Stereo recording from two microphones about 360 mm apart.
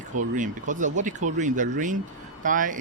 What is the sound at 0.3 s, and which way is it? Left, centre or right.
Speech, right.